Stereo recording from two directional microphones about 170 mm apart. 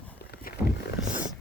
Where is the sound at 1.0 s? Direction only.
5° right (ahead or behind).